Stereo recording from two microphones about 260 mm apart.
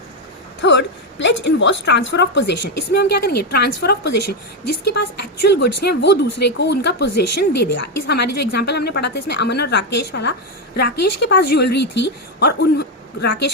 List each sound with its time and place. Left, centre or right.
0.6 s a woman's voice: left
4.6 s speech: left
4.9 s a woman's voice: left
7.0 s speech: left
7.6 s a woman's voice: left